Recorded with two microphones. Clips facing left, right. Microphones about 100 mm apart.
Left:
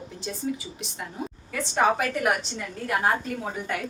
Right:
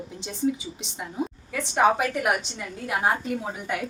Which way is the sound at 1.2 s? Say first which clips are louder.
Right 6 dB; 15° right (ahead or behind).